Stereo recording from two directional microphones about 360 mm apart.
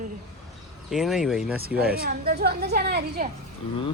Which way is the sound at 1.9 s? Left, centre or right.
Right.